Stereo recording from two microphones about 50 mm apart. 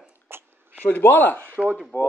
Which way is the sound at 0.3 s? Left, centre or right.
Right.